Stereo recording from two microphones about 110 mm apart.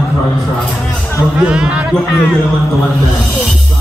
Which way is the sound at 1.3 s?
5° right (ahead or behind).